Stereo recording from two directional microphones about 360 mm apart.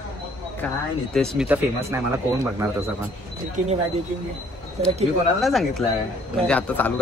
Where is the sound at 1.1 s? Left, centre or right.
Centre.